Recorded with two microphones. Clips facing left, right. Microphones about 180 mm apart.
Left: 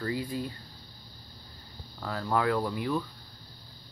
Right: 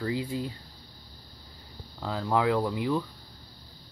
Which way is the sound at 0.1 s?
20° right (ahead or behind).